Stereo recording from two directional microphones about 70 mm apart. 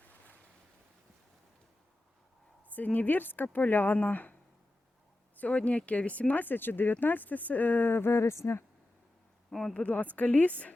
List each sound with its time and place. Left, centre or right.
2.6 s speech: left
5.4 s speech: centre; by 8.6 s left
9.5 s speech: centre
9.7 s speech: left